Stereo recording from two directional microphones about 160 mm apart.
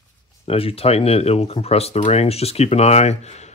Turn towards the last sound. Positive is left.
turn(degrees=45)  # may be behind; listen again after turning